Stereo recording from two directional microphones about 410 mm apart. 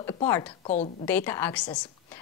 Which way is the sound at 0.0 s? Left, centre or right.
Centre.